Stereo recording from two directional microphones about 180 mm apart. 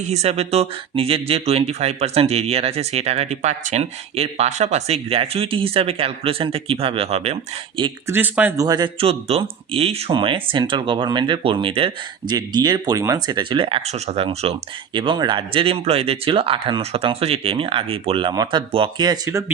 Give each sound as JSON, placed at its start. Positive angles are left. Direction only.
{"t": 0.0, "sound": "speech", "side_deg": -35}
{"t": 8.0, "sound": "speech", "side_deg": -10}
{"t": 8.6, "sound": "speech", "side_deg": -25}